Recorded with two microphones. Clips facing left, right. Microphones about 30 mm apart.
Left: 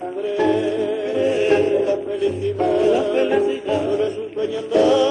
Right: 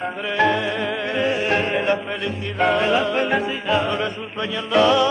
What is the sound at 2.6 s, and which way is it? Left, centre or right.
Music, right.